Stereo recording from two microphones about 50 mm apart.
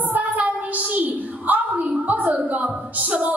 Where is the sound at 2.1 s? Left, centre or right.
Right.